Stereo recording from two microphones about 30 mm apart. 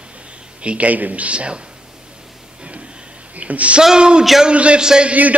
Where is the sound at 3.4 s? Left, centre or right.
Right.